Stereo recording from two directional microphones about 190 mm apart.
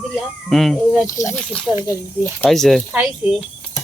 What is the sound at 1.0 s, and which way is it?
Speech, 15° left (ahead or behind).